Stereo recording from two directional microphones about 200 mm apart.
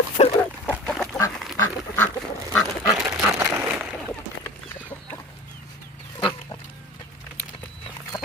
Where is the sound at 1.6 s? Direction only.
10° left (ahead or behind).